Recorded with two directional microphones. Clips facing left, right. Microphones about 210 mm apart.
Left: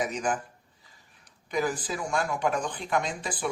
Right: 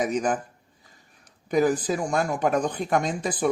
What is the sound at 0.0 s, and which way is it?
Speech, 50° right (ahead or behind).